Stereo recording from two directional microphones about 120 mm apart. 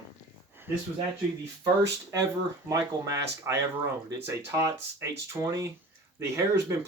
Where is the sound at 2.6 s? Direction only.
30° right (ahead or behind).